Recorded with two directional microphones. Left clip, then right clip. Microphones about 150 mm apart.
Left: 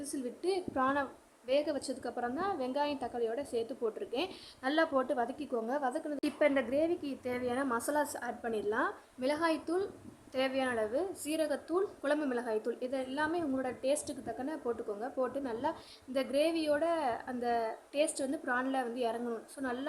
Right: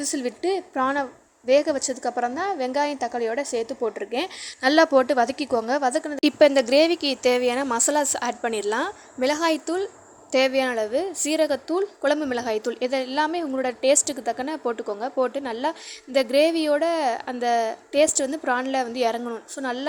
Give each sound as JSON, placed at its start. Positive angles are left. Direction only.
{"t": 0.0, "sound": "a woman's voice", "side_deg": -45}
{"t": 10.3, "sound": "a woman's voice", "side_deg": -45}